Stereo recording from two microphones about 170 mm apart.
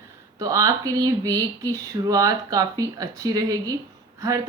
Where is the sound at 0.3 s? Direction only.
20° right (ahead or behind).